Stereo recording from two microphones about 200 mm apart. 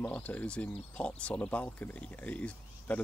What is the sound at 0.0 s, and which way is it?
Speech, 5° left (ahead or behind).